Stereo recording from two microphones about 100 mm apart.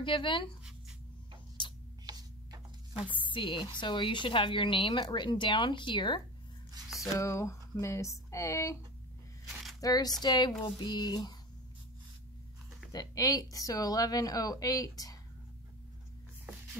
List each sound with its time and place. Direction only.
0.0 s speech: 55° left (ahead or behind)
1.6 s tick-tock: 55° left (ahead or behind)
2.0 s a sound: 40° right (ahead or behind)
2.9 s speech: 10° right (ahead or behind)
3.3 s a woman's voice: 55° left (ahead or behind)
7.2 s a sound: 30° left (ahead or behind)
7.8 s speech: 30° left (ahead or behind)
9.8 s a woman's voice: 40° left (ahead or behind)
12.9 s speech: 40° left (ahead or behind)